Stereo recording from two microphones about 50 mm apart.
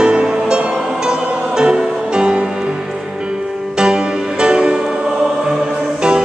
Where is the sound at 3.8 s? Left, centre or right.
Centre.